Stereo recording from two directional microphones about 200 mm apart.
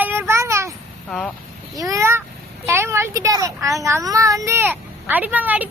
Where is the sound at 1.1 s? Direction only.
Centre (ahead or behind).